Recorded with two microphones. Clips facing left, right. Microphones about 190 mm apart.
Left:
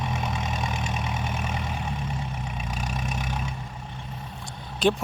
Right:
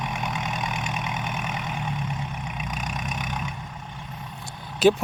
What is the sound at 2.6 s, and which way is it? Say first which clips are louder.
Vehicle: even; 30° left (ahead or behind).